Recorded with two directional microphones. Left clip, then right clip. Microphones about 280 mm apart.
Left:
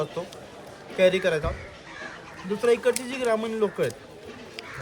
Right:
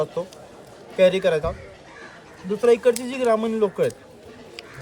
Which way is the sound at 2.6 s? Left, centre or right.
Centre.